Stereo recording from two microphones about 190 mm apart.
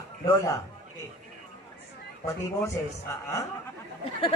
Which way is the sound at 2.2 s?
15° left (ahead or behind).